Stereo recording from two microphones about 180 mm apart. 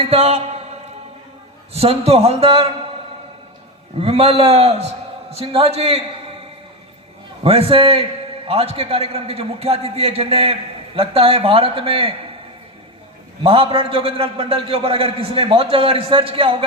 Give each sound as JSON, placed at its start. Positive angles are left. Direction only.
{"t": 0.0, "sound": "a man's voice", "side_deg": -35}
{"t": 1.7, "sound": "a man's voice", "side_deg": -35}
{"t": 4.0, "sound": "a man's voice", "side_deg": -35}
{"t": 7.4, "sound": "a man's voice", "side_deg": -35}
{"t": 13.4, "sound": "a man's voice", "side_deg": -30}